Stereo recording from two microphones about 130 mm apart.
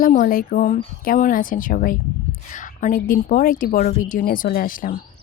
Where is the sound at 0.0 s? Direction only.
90° left.